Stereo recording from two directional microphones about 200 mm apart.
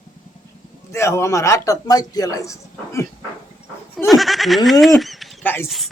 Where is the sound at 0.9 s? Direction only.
15° left (ahead or behind).